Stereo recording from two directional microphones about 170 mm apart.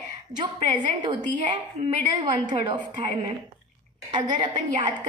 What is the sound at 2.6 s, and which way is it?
Speech, 25° right (ahead or behind).